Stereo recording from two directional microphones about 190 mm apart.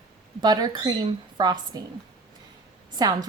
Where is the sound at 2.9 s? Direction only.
20° right (ahead or behind).